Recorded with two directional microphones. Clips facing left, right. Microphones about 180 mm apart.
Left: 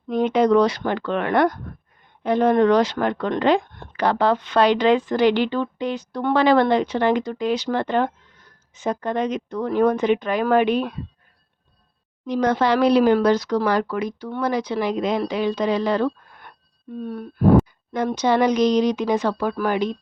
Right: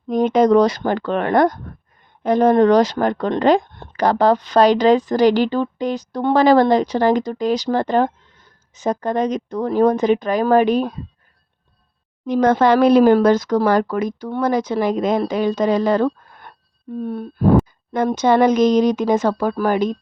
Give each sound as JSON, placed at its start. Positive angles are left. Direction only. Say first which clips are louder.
{"t": 0.1, "sound": "speech", "louder": "right 3 dB", "side_deg": -40}
{"t": 12.2, "sound": "speech", "louder": "right 5 dB", "side_deg": -50}
{"t": 17.0, "sound": "speech", "louder": "right 1 dB", "side_deg": -30}
{"t": 17.9, "sound": "speech", "louder": "right 4 dB", "side_deg": -50}